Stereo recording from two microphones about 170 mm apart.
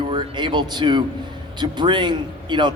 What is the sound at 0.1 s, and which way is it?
Speech, 25° right (ahead or behind).